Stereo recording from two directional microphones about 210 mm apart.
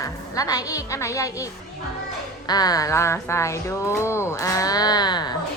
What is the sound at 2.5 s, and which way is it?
A woman's voice, 20° left (ahead or behind).